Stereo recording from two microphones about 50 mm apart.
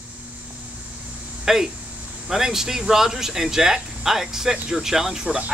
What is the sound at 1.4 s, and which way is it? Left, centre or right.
Speech, centre.